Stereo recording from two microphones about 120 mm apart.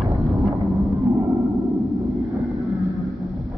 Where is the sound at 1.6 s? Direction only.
Centre (ahead or behind).